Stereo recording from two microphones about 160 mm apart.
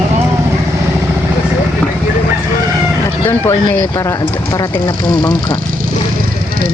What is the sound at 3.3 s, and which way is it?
Speech, 15° left (ahead or behind).